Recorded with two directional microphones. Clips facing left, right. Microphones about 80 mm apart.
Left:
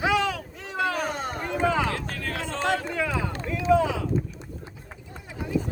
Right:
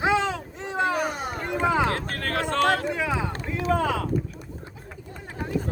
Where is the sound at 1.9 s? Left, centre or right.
Right.